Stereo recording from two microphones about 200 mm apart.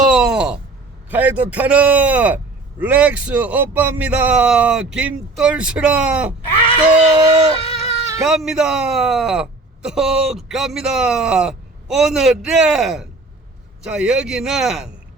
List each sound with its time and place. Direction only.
0.0 s groan: 5° right (ahead or behind)
1.1 s a man's voice: 10° right (ahead or behind)
7.1 s dog: 20° right (ahead or behind)
7.6 s a sound: 30° left (ahead or behind)
8.2 s a man's voice: centre (ahead or behind)